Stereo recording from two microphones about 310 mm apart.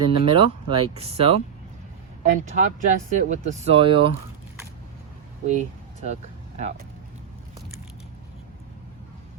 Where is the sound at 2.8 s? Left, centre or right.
Right.